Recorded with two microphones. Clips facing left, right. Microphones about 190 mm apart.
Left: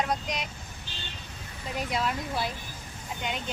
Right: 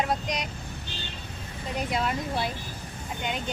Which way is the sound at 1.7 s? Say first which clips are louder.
Right 2 dB; centre (ahead or behind).